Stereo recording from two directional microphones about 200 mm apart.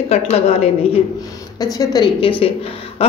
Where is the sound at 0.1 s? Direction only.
30° left (ahead or behind).